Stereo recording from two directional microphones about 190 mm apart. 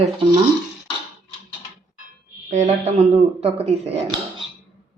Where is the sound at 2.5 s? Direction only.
40° right (ahead or behind).